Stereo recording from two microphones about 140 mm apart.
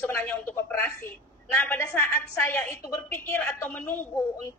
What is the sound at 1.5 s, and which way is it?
A woman's voice, 15° left (ahead or behind).